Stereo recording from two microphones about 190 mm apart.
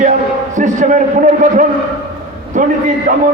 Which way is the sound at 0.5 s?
40° right (ahead or behind).